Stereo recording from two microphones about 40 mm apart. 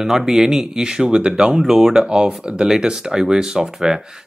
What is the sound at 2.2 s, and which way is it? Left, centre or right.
Speech, right.